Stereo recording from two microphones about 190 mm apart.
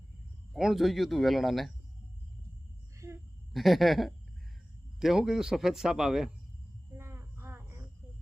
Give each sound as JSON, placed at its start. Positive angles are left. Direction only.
{"t": 0.5, "sound": "speech", "side_deg": 0}
{"t": 3.5, "sound": "speech", "side_deg": 0}
{"t": 6.9, "sound": "cricket", "side_deg": -15}